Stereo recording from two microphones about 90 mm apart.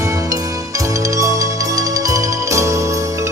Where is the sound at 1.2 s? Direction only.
40° right (ahead or behind).